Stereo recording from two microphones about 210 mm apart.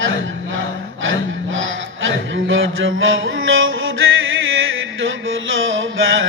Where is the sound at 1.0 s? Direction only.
65° right (ahead or behind).